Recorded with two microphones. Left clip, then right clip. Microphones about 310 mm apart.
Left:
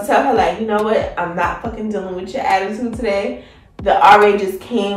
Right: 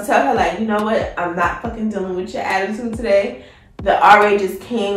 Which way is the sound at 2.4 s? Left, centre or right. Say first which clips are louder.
Left 5 dB; centre.